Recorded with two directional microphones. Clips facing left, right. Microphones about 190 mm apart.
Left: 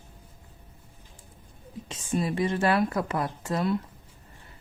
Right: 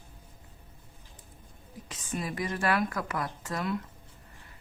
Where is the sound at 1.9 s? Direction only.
30° left (ahead or behind).